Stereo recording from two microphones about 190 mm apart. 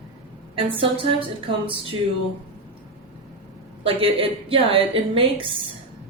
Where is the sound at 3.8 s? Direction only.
30° right (ahead or behind).